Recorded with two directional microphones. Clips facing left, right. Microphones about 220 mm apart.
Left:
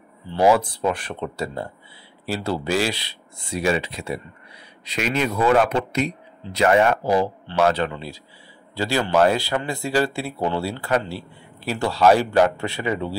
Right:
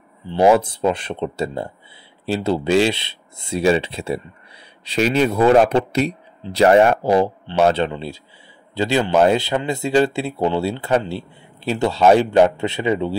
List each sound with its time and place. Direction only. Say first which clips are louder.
0.3 s speech: right 3 dB; 20° right (ahead or behind)